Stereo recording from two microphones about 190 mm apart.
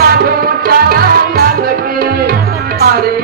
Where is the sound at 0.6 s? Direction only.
50° right (ahead or behind).